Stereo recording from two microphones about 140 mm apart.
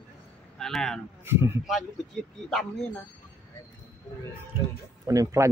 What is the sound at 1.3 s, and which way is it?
Speech, 15° right (ahead or behind).